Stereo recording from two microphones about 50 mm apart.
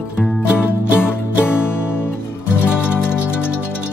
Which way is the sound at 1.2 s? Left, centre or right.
Left.